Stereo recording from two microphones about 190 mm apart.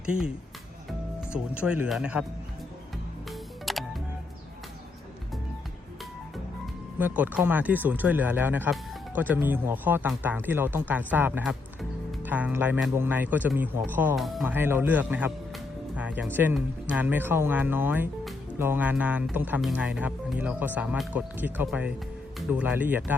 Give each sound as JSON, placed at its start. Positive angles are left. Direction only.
{"t": 0.9, "sound": "speech", "side_deg": -5}
{"t": 3.2, "sound": "music", "side_deg": 0}
{"t": 7.0, "sound": "speech", "side_deg": -10}
{"t": 14.5, "sound": "speech", "side_deg": -10}